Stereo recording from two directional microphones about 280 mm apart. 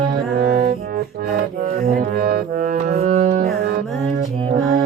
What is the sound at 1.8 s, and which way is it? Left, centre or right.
Music, right.